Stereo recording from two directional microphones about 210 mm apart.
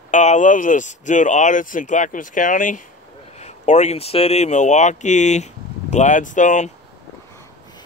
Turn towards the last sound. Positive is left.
turn(degrees=35)  # may be behind; listen again after turning